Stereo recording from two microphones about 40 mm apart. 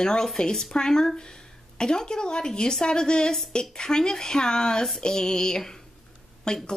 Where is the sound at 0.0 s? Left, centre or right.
Centre.